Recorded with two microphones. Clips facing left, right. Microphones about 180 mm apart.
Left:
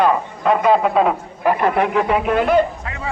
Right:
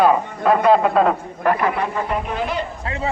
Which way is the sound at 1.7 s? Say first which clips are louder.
Left 6 dB; 75° left (ahead or behind).